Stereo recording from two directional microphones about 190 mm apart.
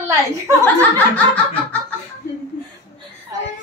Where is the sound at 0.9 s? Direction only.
10° left (ahead or behind).